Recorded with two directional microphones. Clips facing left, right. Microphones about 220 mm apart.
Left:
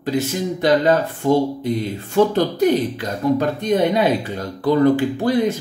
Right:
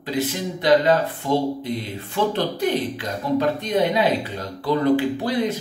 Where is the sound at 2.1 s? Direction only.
45° left (ahead or behind).